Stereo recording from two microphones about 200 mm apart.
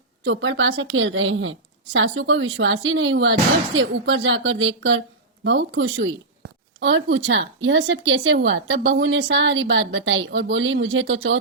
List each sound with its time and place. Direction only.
0.3 s a woman's voice: 65° right (ahead or behind)